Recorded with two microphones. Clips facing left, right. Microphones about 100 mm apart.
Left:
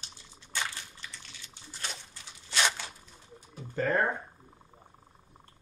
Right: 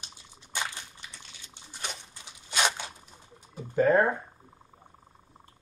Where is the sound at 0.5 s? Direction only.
15° right (ahead or behind).